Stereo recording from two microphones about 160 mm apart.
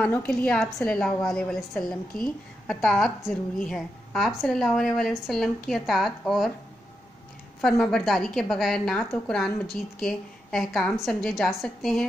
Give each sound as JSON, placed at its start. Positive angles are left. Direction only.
{"t": 0.0, "sound": "a woman's voice", "side_deg": 5}
{"t": 7.6, "sound": "a woman's voice", "side_deg": 5}